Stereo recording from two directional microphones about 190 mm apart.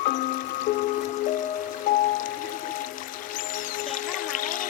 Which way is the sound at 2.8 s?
45° left (ahead or behind).